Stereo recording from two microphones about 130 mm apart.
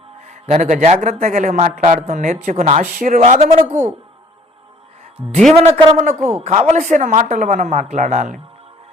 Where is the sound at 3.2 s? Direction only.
55° right (ahead or behind).